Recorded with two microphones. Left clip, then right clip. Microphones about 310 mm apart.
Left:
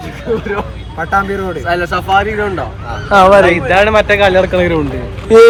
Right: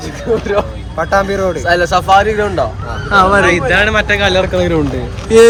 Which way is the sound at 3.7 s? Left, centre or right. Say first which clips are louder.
Left 2 dB; centre.